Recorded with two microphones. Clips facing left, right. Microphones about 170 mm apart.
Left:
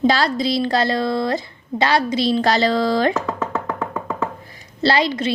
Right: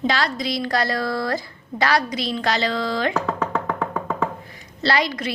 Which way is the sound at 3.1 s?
Centre (ahead or behind).